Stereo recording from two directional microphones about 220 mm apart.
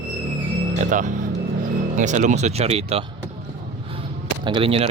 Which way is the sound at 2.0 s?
35° right (ahead or behind).